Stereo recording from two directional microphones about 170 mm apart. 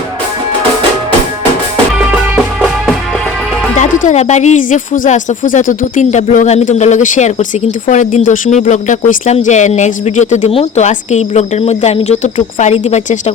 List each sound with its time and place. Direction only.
2.0 s music: 10° right (ahead or behind)
3.8 s speech: 40° left (ahead or behind)